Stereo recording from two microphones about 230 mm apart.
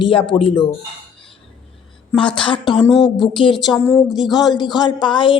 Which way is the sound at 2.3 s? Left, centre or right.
Left.